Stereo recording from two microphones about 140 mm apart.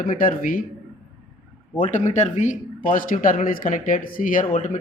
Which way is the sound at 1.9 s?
60° left (ahead or behind).